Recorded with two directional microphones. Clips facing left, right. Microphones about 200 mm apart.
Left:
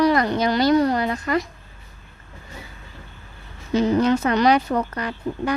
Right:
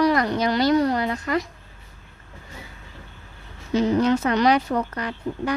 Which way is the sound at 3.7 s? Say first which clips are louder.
Left 1 dB; 50° left (ahead or behind).